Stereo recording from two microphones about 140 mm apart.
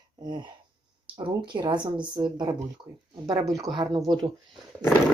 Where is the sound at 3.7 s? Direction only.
30° right (ahead or behind).